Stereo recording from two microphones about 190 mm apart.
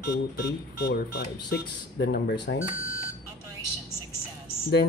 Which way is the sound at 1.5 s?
60° left (ahead or behind).